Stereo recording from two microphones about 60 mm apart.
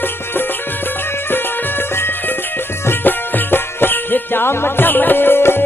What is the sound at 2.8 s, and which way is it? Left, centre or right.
Music, left.